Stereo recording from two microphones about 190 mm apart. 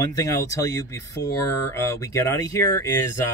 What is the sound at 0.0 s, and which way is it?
Speech, 20° left (ahead or behind).